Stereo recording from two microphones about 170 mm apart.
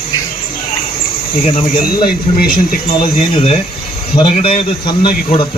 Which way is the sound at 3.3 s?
35° left (ahead or behind).